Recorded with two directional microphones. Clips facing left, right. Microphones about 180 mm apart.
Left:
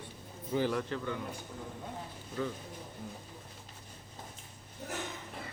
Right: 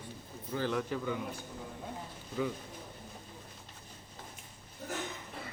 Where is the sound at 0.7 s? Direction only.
5° right (ahead or behind).